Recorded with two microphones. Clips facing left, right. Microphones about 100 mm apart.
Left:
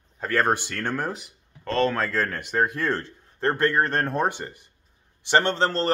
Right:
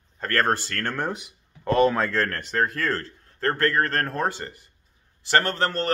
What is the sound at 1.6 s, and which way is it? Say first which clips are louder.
Speech: right 4 dB; 15° right (ahead or behind).